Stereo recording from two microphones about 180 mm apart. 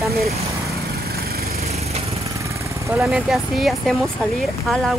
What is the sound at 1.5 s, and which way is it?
Lawn mower, 35° right (ahead or behind).